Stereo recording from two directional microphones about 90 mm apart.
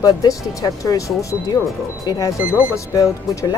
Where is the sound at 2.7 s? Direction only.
35° left (ahead or behind).